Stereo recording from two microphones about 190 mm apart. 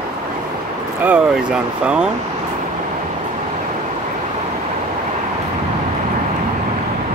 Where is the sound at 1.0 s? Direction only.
5° right (ahead or behind).